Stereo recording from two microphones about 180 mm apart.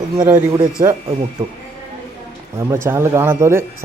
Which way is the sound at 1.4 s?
30° right (ahead or behind).